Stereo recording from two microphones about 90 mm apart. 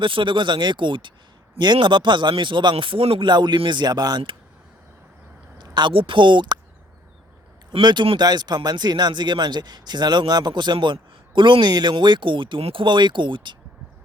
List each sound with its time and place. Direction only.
0.0 s speech: 65° right (ahead or behind); by 4.2 s 45° right (ahead or behind)
5.5 s a sound: 55° right (ahead or behind)
5.9 s speech: 75° right (ahead or behind); by 6.6 s 60° right (ahead or behind)
7.7 s speech: 60° right (ahead or behind)